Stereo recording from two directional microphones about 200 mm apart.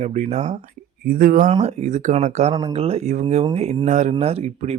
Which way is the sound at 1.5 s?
30° right (ahead or behind).